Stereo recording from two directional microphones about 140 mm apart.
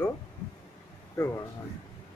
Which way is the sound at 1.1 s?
20° left (ahead or behind).